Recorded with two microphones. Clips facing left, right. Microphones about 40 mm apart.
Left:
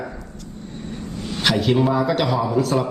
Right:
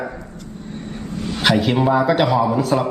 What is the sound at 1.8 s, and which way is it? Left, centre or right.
Speech, centre.